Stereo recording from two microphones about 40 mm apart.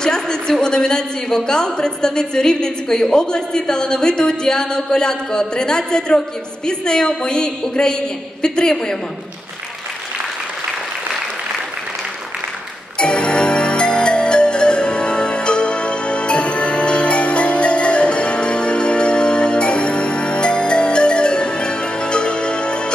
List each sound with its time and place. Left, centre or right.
0.0 s a man's voice: centre
13.0 s music: left